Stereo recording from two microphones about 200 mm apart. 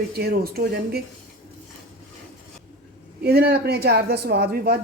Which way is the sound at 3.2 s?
55° right (ahead or behind).